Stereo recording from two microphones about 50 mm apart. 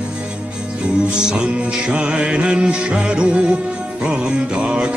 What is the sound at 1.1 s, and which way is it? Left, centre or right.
Music, centre.